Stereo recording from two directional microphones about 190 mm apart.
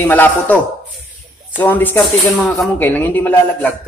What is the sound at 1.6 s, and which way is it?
Speech, 10° left (ahead or behind).